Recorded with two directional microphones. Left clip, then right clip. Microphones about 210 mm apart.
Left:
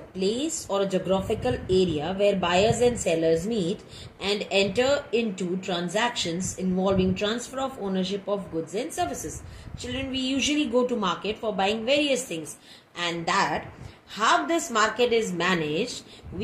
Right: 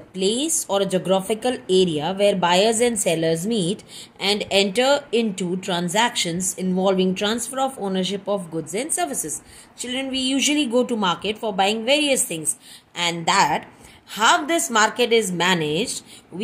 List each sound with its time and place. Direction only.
0.1 s speech: 55° right (ahead or behind)